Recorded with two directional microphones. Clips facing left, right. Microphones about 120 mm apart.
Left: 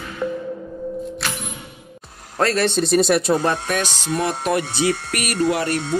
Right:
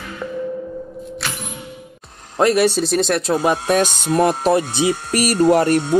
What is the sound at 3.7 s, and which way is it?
Speech, 40° right (ahead or behind).